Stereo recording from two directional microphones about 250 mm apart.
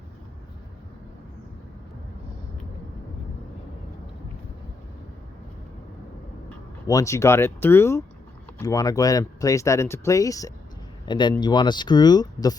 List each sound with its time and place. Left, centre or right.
6.8 s speech: centre